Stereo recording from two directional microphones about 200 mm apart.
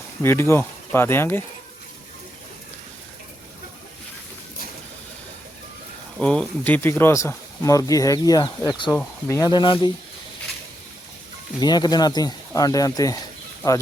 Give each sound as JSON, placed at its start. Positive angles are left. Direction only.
{"t": 0.2, "sound": "speech", "side_deg": 10}
{"t": 6.1, "sound": "speech", "side_deg": 5}
{"t": 11.6, "sound": "speech", "side_deg": 20}